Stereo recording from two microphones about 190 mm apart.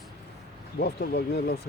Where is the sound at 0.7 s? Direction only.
55° left (ahead or behind).